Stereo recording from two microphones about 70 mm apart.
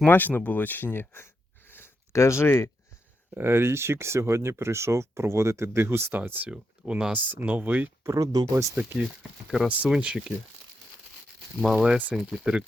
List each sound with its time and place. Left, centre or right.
0.1 s speech: left
3.3 s speech: right
6.5 s speech: centre
8.0 s speech: right
8.7 s speech: right
11.6 s speech: centre
11.9 s speech: centre